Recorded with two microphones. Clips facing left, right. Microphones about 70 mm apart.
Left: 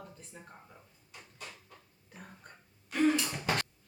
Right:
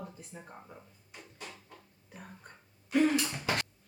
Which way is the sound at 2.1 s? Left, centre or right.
Centre.